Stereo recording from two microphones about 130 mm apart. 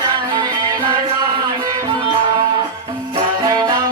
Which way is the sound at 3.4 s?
30° right (ahead or behind).